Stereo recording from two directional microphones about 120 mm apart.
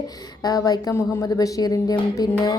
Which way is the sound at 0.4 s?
30° left (ahead or behind).